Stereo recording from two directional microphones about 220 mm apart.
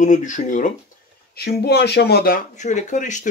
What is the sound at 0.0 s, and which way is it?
Speech, 35° left (ahead or behind).